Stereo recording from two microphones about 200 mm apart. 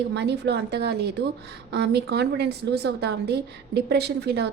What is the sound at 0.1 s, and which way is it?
A woman's voice, 55° right (ahead or behind).